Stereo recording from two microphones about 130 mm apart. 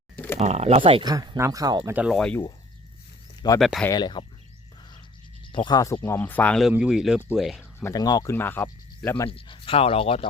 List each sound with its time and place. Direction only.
0.3 s speech: 55° right (ahead or behind)
1.0 s speech: 30° right (ahead or behind)
1.8 s speech: 15° right (ahead or behind)
2.1 s speech: 5° left (ahead or behind)
3.6 s speech: centre (ahead or behind)
3.9 s speech: 35° left (ahead or behind)
5.5 s speech: 35° left (ahead or behind)
6.0 s speech: 15° left (ahead or behind)
6.6 s speech: 5° right (ahead or behind)
7.9 s speech: 30° left (ahead or behind)
8.3 s speech: 15° left (ahead or behind)
9.2 s speech: 40° left (ahead or behind)